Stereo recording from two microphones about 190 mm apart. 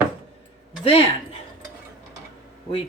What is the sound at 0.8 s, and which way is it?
Speech, 30° left (ahead or behind).